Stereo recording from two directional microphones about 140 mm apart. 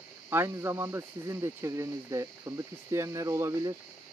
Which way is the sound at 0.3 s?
15° right (ahead or behind).